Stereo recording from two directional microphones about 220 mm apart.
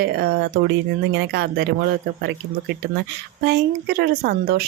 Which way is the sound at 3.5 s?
50° right (ahead or behind).